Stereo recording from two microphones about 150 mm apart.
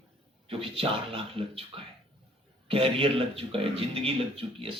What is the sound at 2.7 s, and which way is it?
A man's voice, 35° right (ahead or behind).